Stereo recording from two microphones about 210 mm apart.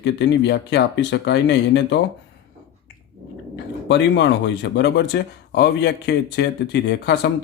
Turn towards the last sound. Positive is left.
turn(degrees=55)  # may be behind; listen again after turning